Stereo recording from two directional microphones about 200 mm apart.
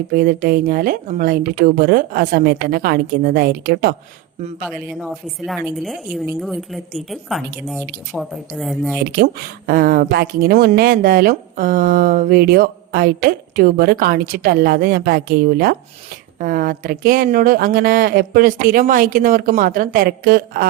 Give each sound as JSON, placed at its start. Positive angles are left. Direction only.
{"t": 0.1, "sound": "speech", "side_deg": -45}
{"t": 5.0, "sound": "a woman's voice", "side_deg": 0}
{"t": 9.0, "sound": "speech", "side_deg": -50}